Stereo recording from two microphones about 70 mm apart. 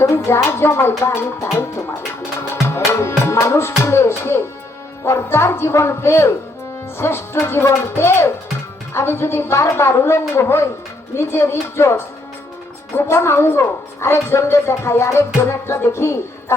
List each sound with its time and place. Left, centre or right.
0.3 s a woman's voice: left
2.6 s music: left
5.0 s a woman's voice: left